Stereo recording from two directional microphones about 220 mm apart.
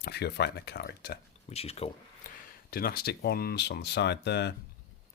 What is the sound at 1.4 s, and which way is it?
Speech, 25° left (ahead or behind).